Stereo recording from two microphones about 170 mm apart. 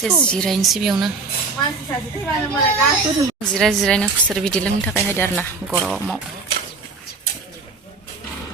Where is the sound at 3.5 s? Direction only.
Centre (ahead or behind).